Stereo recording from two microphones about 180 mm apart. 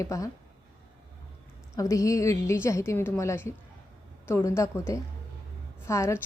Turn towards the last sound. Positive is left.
turn(degrees=15)  # may be behind; listen again after turning